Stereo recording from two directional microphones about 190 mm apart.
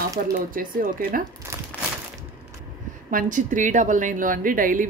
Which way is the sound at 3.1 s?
45° right (ahead or behind).